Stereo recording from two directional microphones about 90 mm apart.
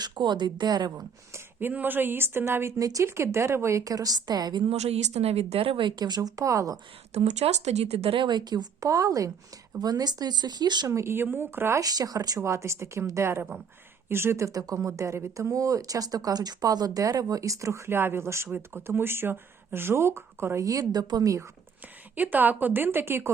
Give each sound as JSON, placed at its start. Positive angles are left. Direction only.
{"t": 0.0, "sound": "a woman's voice", "side_deg": -55}
{"t": 0.9, "sound": "speech", "side_deg": -35}
{"t": 1.5, "sound": "speech", "side_deg": -20}
{"t": 5.3, "sound": "speech", "side_deg": -90}
{"t": 6.0, "sound": "speech", "side_deg": -50}
{"t": 7.4, "sound": "speech", "side_deg": -90}
{"t": 8.0, "sound": "a woman's voice", "side_deg": -70}
{"t": 8.8, "sound": "speech", "side_deg": -40}
{"t": 10.8, "sound": "speech", "side_deg": -30}
{"t": 11.8, "sound": "speech", "side_deg": -45}
{"t": 12.4, "sound": "speech", "side_deg": -30}
{"t": 22.1, "sound": "speech", "side_deg": -20}